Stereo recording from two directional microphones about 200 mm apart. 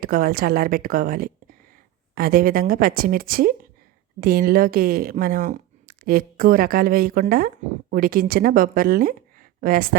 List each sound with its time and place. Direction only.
0.0 s speech: 45° right (ahead or behind)